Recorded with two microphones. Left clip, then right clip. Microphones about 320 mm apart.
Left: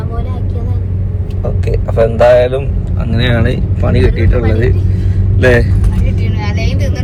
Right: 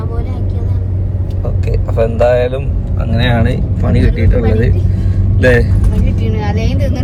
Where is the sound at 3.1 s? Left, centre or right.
Centre.